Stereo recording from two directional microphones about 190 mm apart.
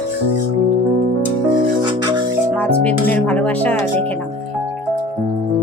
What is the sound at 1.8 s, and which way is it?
Music, 25° right (ahead or behind).